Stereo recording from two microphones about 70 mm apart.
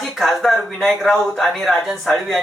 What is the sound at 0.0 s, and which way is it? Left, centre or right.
Speech, centre.